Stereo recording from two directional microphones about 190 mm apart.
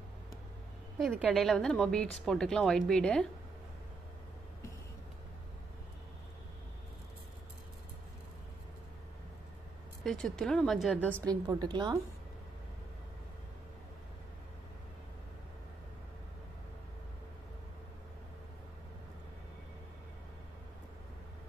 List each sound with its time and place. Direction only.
0.9 s speech: centre (ahead or behind)
10.0 s speech: 5° left (ahead or behind)
11.1 s a woman's voice: 20° right (ahead or behind)